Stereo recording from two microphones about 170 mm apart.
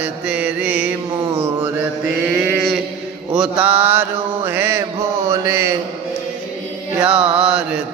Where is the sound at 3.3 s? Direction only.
10° right (ahead or behind).